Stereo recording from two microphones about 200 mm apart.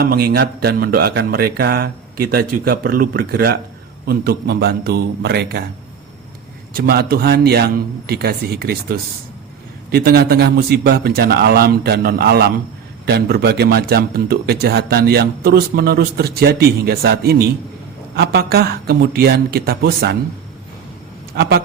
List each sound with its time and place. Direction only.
0.0 s a man's voice: 50° right (ahead or behind)
6.7 s a man's voice: 50° right (ahead or behind)
21.3 s a man's voice: 50° right (ahead or behind)